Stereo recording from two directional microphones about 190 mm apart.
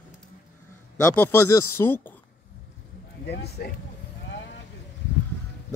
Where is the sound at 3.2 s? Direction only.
60° left (ahead or behind).